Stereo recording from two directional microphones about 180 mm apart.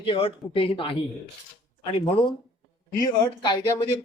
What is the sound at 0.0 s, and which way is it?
Speech, 30° left (ahead or behind).